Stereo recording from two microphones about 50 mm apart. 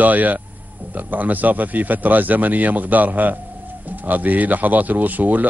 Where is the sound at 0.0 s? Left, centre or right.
Right.